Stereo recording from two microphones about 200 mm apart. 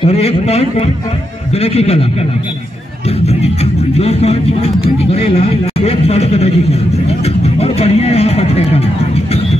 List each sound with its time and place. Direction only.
0.0 s a man's voice: 30° left (ahead or behind)
4.0 s a man's voice: 30° left (ahead or behind)